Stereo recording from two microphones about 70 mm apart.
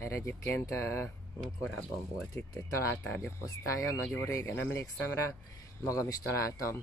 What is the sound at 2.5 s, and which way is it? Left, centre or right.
Speech, left.